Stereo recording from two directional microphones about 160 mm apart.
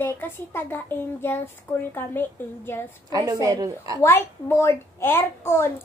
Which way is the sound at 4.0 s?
15° left (ahead or behind).